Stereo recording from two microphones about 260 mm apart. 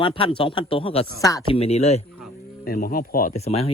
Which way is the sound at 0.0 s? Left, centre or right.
Centre.